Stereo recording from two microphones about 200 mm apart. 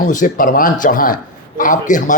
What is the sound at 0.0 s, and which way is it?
Speech, 40° left (ahead or behind).